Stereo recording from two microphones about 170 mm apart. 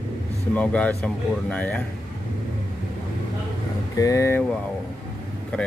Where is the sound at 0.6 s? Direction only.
5° left (ahead or behind).